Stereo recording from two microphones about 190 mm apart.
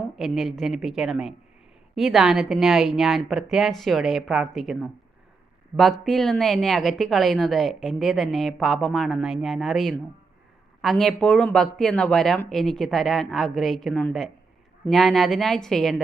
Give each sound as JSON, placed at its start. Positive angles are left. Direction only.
{"t": 0.2, "sound": "a woman's voice", "side_deg": 0}
{"t": 5.7, "sound": "speech", "side_deg": -20}
{"t": 6.1, "sound": "a woman's voice", "side_deg": 0}